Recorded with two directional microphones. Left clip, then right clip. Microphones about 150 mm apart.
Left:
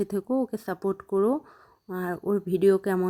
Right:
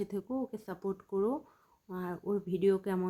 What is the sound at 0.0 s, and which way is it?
Speech, 55° left (ahead or behind).